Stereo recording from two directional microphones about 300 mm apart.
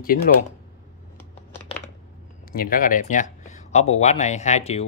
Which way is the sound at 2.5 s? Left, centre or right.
Left.